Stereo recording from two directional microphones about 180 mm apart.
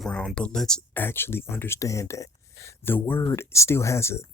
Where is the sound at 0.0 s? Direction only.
5° left (ahead or behind).